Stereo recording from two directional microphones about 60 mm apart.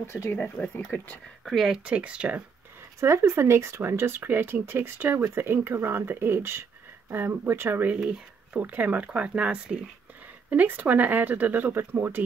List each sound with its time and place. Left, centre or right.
0.0 s speech: left
0.9 s speech: left
1.4 s speech: centre
1.9 s speech: centre
3.0 s speech: right
7.8 s speech: centre; by 12.2 s right